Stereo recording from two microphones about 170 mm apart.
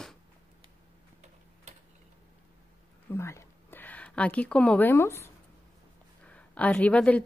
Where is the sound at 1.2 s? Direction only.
45° right (ahead or behind).